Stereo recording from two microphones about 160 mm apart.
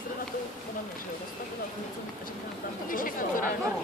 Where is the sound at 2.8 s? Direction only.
60° left (ahead or behind).